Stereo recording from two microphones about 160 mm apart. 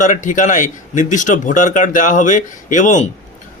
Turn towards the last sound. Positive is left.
turn(degrees=50)  # may be behind; listen again after turning